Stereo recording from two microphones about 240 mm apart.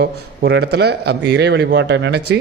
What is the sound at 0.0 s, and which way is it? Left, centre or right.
A man's voice, right.